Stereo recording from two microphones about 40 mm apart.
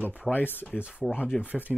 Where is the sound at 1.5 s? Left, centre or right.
Right.